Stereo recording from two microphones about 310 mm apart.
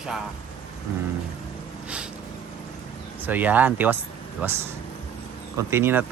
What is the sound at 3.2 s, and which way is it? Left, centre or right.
Speech, centre.